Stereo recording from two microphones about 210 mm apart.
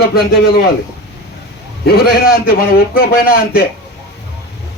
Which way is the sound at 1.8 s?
50° left (ahead or behind).